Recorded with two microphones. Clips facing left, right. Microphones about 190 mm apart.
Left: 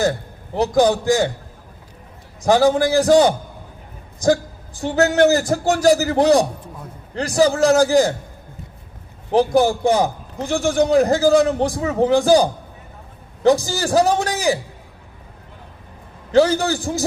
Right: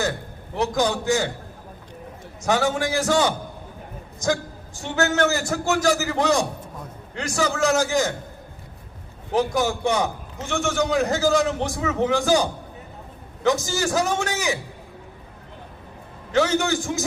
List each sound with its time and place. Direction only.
0.5 s a man's voice: 35° left (ahead or behind)
2.4 s a man's voice: 35° left (ahead or behind)
9.3 s a man's voice: 35° left (ahead or behind)
16.3 s a man's voice: 35° left (ahead or behind)